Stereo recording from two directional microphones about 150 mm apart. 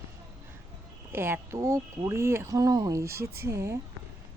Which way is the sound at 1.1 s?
15° right (ahead or behind).